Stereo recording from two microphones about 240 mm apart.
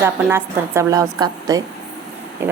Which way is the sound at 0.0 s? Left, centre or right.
Centre.